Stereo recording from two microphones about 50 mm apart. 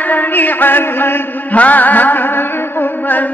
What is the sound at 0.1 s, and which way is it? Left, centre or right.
Mantra, left.